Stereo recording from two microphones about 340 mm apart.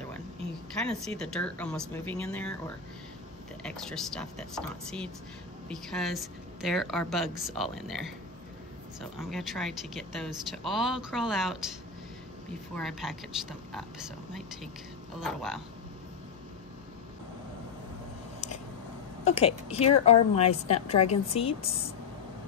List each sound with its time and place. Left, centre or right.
0.7 s speech: centre
3.6 s speech: centre
9.2 s speech: centre
12.7 s speech: centre
19.2 s a woman's voice: centre